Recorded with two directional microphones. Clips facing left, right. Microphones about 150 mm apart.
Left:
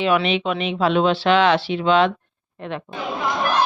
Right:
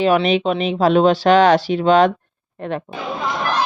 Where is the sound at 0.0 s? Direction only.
40° right (ahead or behind).